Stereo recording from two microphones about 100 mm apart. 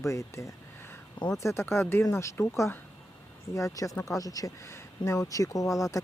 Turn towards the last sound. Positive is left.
turn(degrees=35)  # may be behind; listen again after turning